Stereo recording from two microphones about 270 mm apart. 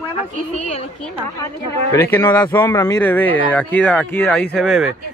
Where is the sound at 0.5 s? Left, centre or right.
Left.